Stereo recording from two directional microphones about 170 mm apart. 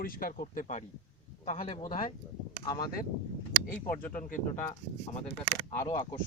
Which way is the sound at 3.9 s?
55° left (ahead or behind).